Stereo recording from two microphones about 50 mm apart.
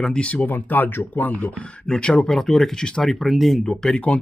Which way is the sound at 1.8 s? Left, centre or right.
Centre.